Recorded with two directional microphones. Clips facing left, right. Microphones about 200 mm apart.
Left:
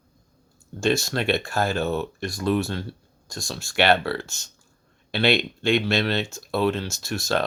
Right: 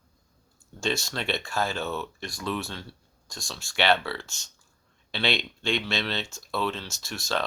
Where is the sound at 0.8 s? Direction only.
50° left (ahead or behind).